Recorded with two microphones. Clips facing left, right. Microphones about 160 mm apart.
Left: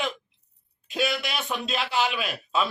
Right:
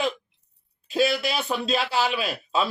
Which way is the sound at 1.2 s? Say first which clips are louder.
Right 4 dB; 35° right (ahead or behind).